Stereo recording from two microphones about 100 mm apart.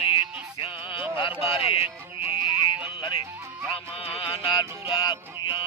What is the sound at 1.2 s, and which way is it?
Speech, 65° left (ahead or behind).